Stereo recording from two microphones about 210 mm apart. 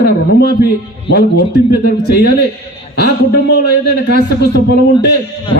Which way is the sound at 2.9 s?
50° left (ahead or behind).